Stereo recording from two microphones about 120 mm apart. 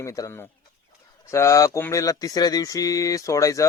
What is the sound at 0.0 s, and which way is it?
Speech, 25° left (ahead or behind).